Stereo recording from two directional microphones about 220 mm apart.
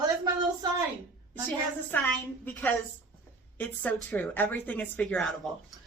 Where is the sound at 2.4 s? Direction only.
10° left (ahead or behind).